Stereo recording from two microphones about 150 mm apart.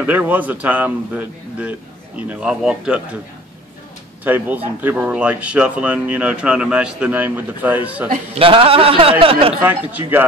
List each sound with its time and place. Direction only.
0.0 s speech: 10° right (ahead or behind)
4.2 s speech: 10° right (ahead or behind)
8.4 s speech: 35° right (ahead or behind)